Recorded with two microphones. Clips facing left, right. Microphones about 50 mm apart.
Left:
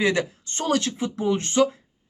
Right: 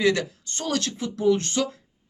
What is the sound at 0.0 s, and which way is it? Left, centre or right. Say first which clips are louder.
Speech: even; left.